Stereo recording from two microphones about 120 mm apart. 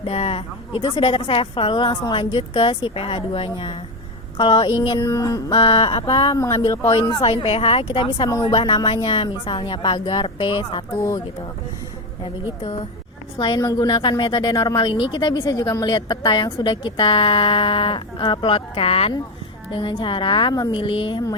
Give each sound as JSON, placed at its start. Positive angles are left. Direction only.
{"t": 0.0, "sound": "a woman's voice", "side_deg": 55}
{"t": 5.0, "sound": "music", "side_deg": 25}
{"t": 5.5, "sound": "a woman's voice", "side_deg": 45}
{"t": 6.3, "sound": "music", "side_deg": 25}
{"t": 7.0, "sound": "a woman's voice", "side_deg": 40}
{"t": 10.9, "sound": "music", "side_deg": 20}
{"t": 13.6, "sound": "a woman's voice", "side_deg": 30}